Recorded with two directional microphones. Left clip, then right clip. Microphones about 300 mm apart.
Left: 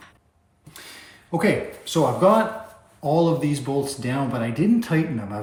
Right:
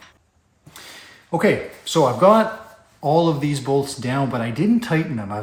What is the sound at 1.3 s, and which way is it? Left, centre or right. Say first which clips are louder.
Speech: right 3 dB; centre.